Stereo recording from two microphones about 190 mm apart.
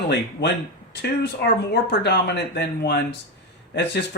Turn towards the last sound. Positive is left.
turn(degrees=65)  # may be behind; listen again after turning